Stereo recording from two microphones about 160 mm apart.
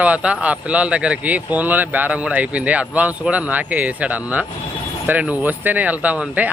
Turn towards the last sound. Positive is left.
turn(degrees=-10)  # may be behind; listen again after turning